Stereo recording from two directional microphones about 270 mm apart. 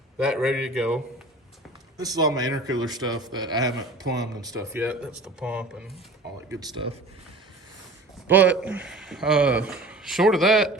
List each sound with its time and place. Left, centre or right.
0.3 s speech: centre
2.0 s a man's voice: centre
6.6 s a man's voice: centre
8.3 s speech: centre